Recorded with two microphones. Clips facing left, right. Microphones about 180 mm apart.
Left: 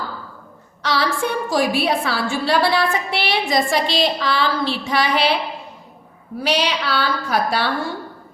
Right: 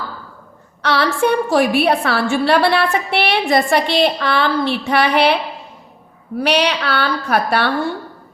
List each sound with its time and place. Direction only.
0.8 s a woman's voice: 60° right (ahead or behind)
6.4 s a woman's voice: 65° right (ahead or behind)